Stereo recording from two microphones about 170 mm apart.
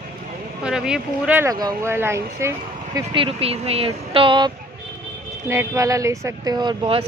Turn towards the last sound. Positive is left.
turn(degrees=-30)  # may be behind; listen again after turning